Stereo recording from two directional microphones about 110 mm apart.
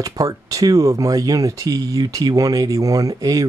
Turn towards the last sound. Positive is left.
turn(degrees=-35)  # may be behind; listen again after turning